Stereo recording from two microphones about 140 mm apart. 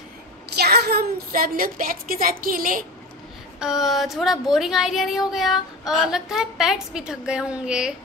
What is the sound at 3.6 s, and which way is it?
Speech, 5° right (ahead or behind).